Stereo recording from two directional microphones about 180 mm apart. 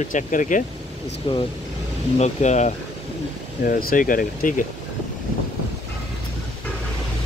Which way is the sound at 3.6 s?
55° left (ahead or behind).